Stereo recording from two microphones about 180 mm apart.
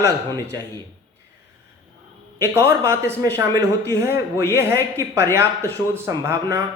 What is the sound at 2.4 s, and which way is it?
Speech, 15° right (ahead or behind).